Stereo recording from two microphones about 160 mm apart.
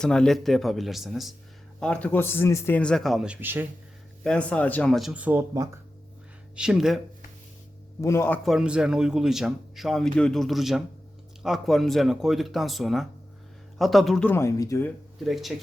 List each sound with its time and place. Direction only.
0.0 s a man's voice: 5° left (ahead or behind)
3.4 s speech: 10° right (ahead or behind)
4.2 s speech: 5° left (ahead or behind); by 5.8 s 15° right (ahead or behind)
6.6 s speech: 5° right (ahead or behind)
8.0 s a man's voice: 15° left (ahead or behind)
8.4 s speech: 5° right (ahead or behind)
14.3 s speech: 20° left (ahead or behind)
14.8 s speech: centre (ahead or behind)